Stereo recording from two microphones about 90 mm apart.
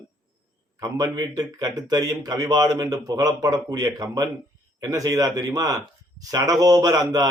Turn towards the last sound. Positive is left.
turn(degrees=-45)  # may be behind; listen again after turning